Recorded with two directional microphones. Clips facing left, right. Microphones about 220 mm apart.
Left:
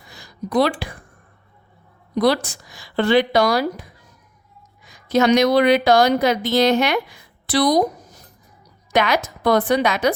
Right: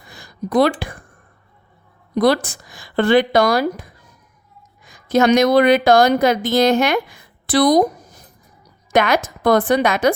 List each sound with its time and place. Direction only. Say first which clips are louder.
0.0 s a sound: right 3 dB; 50° right (ahead or behind)
2.1 s speech: right 2 dB; 50° right (ahead or behind)
8.9 s speech: right 3 dB; 50° right (ahead or behind)